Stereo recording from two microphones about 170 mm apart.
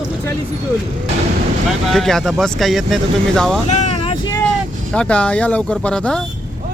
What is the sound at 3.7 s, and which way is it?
Vehicle, 40° left (ahead or behind).